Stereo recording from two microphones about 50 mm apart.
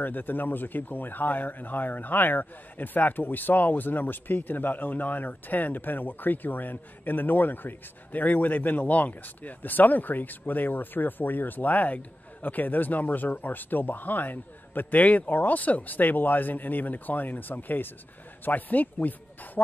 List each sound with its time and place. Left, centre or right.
0.0 s a man's voice: left